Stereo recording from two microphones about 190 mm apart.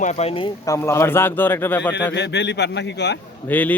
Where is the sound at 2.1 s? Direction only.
65° left (ahead or behind).